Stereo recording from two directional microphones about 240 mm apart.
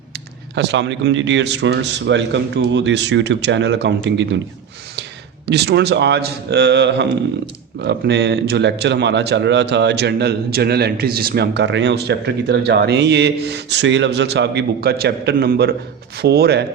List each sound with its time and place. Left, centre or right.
0.5 s a man's voice: right
5.5 s a man's voice: right